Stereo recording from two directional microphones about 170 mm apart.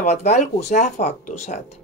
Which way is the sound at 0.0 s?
40° left (ahead or behind).